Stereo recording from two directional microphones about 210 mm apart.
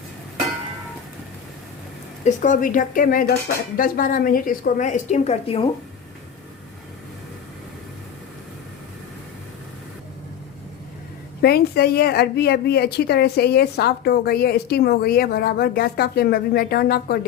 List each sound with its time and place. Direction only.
2.2 s a woman's voice: 35° left (ahead or behind)
11.4 s a woman's voice: 50° left (ahead or behind)